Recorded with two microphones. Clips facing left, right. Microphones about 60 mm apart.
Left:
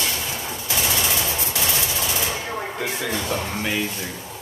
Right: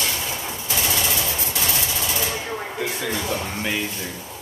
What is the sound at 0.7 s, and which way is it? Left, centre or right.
Fusillade, left.